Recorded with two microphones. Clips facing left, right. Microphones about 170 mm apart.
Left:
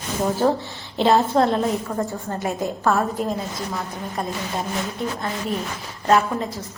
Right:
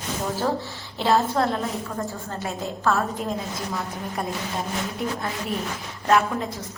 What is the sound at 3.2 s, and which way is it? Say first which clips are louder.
Speech: left 3 dB; 5° left (ahead or behind).